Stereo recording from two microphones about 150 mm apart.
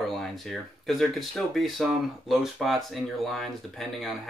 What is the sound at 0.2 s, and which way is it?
Speech, centre (ahead or behind).